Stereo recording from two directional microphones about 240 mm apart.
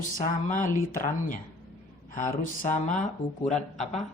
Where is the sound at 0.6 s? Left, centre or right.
Left.